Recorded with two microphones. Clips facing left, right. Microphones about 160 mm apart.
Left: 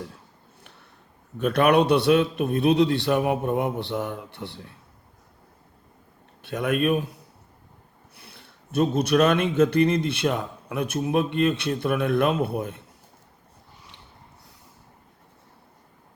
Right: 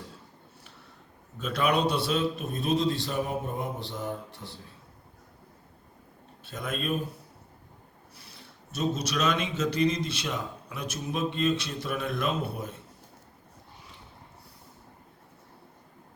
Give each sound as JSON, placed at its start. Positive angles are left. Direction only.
{"t": 1.4, "sound": "speech", "side_deg": 60}
{"t": 6.4, "sound": "a man's voice", "side_deg": 65}
{"t": 8.1, "sound": "speech", "side_deg": 60}